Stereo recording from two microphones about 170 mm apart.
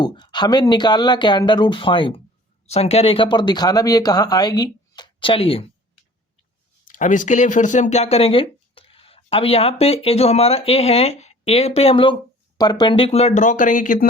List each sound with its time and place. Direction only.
0.0 s speech: 25° left (ahead or behind)
6.8 s speech: 50° left (ahead or behind)